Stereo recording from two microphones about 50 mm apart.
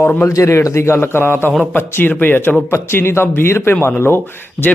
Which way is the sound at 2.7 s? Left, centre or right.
Left.